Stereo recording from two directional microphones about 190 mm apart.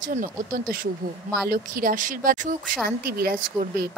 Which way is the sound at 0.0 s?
45° right (ahead or behind).